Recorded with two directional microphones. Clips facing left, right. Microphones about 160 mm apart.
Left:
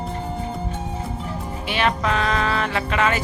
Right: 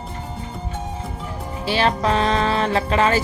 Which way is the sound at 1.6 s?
35° right (ahead or behind).